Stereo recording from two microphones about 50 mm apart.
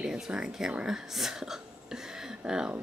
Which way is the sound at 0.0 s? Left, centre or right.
Centre.